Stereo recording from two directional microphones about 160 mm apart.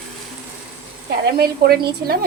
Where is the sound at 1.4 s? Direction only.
75° right (ahead or behind).